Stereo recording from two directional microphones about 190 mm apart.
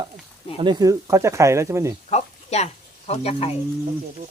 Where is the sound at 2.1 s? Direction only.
35° left (ahead or behind).